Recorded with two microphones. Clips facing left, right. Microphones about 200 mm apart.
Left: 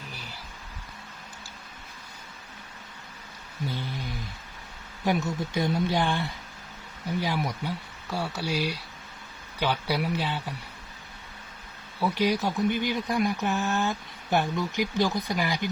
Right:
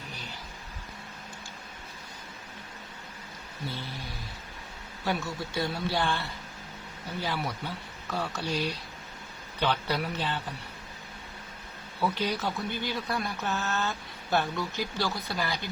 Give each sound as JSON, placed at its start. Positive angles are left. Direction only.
{"t": 3.7, "sound": "speech", "side_deg": 15}
{"t": 5.0, "sound": "speech", "side_deg": 15}
{"t": 11.9, "sound": "speech", "side_deg": 10}